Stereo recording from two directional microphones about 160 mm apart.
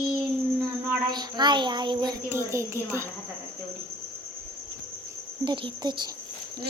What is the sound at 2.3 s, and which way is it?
Speech, 15° right (ahead or behind).